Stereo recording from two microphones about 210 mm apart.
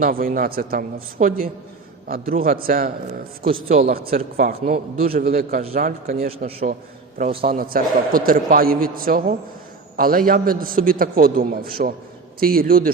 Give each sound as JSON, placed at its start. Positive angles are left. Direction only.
{"t": 0.0, "sound": "a man's voice", "side_deg": -40}
{"t": 3.4, "sound": "a man's voice", "side_deg": -30}
{"t": 3.9, "sound": "a man's voice", "side_deg": -45}